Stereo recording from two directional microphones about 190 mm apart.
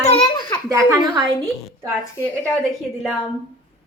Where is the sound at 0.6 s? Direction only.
15° right (ahead or behind).